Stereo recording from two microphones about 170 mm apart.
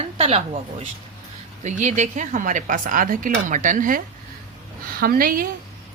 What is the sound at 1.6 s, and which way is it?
Speech, 45° right (ahead or behind).